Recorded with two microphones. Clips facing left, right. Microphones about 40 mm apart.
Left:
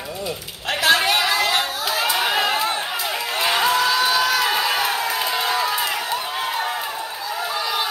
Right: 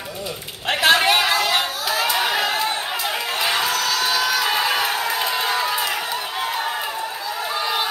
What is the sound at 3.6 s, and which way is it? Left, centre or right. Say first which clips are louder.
Crowd: left 3 dB; centre.